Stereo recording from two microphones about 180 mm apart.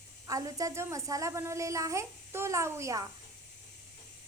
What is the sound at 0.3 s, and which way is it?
A woman's voice, 20° right (ahead or behind).